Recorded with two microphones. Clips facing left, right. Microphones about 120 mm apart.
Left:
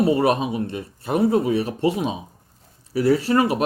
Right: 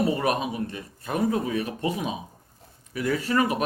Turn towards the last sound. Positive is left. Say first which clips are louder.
# left 6 dB
turn(degrees=30)  # may be behind; listen again after turning